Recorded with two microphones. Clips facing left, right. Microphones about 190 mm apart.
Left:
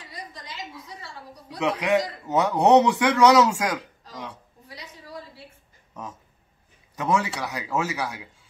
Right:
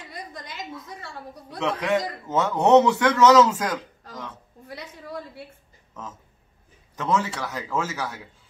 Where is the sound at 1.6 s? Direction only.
15° left (ahead or behind).